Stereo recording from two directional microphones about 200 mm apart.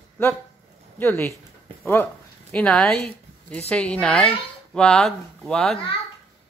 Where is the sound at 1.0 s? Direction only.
15° left (ahead or behind).